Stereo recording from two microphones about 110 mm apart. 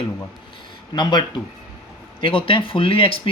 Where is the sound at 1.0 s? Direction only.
45° left (ahead or behind).